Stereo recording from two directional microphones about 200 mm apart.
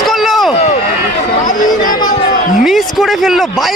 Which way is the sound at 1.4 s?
40° left (ahead or behind).